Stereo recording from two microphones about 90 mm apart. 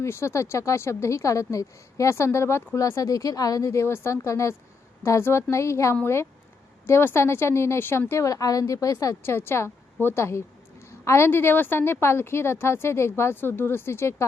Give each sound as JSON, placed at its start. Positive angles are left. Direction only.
{"t": 0.0, "sound": "a woman's voice", "side_deg": 30}
{"t": 9.2, "sound": "a woman's voice", "side_deg": 25}